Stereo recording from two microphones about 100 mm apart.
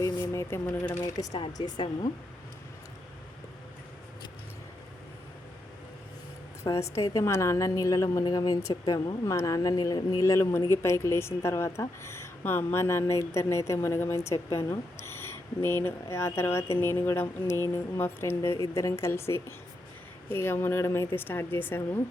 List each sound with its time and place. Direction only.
0.0 s speech: 30° left (ahead or behind)
1.5 s a woman's voice: 45° left (ahead or behind)
6.7 s speech: 30° left (ahead or behind)